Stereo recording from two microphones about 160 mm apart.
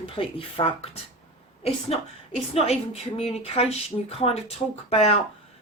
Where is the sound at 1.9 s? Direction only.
40° left (ahead or behind).